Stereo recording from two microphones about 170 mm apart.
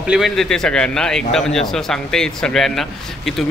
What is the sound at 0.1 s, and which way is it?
A man's voice, centre (ahead or behind).